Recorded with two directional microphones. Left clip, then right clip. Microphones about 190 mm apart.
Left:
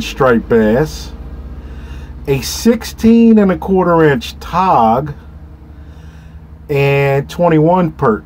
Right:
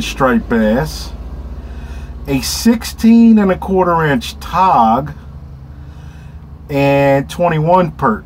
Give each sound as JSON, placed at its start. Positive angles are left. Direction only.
{"t": 0.0, "sound": "speech", "side_deg": 25}
{"t": 2.2, "sound": "speech", "side_deg": 25}
{"t": 6.7, "sound": "speech", "side_deg": 25}